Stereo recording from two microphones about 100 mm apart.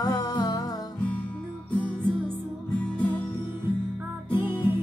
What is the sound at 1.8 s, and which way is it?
Music, 10° left (ahead or behind).